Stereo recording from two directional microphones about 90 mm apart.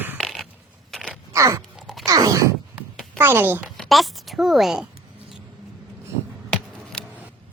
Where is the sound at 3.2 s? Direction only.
20° right (ahead or behind).